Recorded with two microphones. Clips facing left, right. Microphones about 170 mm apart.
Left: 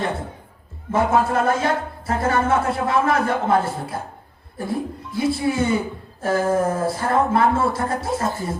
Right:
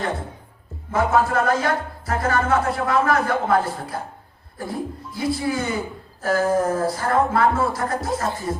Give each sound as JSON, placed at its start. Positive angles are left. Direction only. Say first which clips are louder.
{"t": 0.9, "sound": "music", "louder": "left 1 dB", "side_deg": 25}